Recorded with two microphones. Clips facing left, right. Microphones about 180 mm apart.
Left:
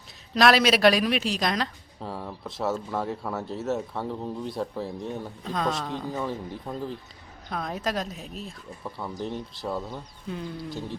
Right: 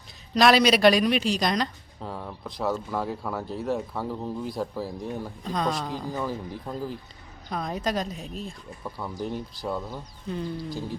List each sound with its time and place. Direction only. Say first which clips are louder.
0.3 s a woman's voice: right 1 dB; centre (ahead or behind)